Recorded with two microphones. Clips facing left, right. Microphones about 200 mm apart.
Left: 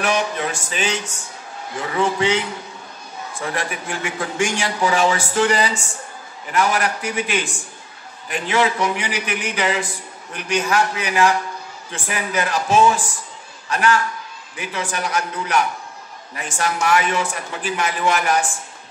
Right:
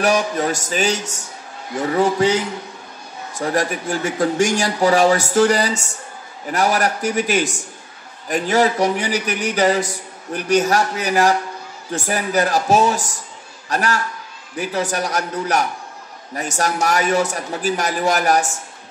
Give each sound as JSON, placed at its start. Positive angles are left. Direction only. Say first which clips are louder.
{"t": 0.0, "sound": "a man's voice", "louder": "right 4 dB", "side_deg": -40}